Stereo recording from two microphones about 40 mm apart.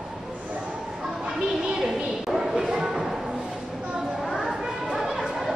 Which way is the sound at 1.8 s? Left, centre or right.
Centre.